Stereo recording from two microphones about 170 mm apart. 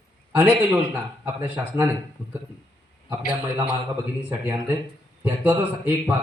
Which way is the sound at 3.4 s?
10° right (ahead or behind).